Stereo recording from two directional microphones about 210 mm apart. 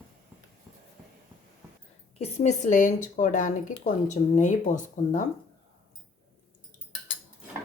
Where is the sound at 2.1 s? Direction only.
30° left (ahead or behind).